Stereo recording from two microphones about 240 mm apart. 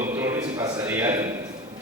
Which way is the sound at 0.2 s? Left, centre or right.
Centre.